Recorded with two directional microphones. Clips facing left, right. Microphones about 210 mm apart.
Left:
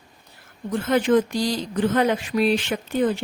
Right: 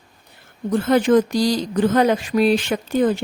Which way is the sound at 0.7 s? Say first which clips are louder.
Right 4 dB; 40° right (ahead or behind).